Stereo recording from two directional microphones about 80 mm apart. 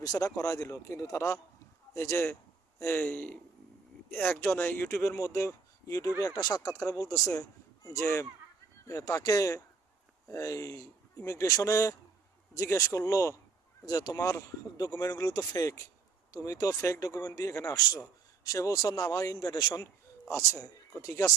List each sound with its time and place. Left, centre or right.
0.0 s speech: left
4.9 s speech: left
6.8 s speech: left
13.8 s speech: left
19.4 s a man's voice: left
19.8 s speech: left
20.6 s speech: left